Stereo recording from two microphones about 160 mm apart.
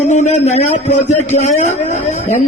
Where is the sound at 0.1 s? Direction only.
45° left (ahead or behind).